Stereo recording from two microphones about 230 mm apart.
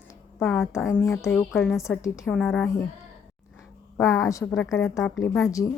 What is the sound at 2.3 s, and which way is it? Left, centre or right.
Speech, centre.